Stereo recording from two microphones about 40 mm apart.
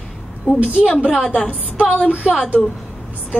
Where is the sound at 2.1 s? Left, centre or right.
Right.